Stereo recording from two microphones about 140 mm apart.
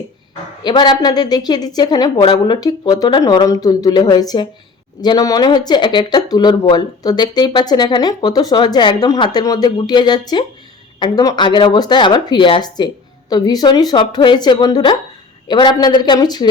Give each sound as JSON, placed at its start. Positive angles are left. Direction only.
{"t": 0.6, "sound": "speech", "side_deg": 30}